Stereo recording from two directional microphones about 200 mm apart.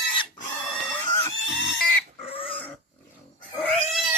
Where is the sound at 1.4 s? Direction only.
65° left (ahead or behind).